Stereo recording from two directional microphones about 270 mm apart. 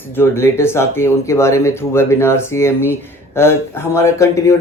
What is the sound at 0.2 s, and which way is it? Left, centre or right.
Speech, centre.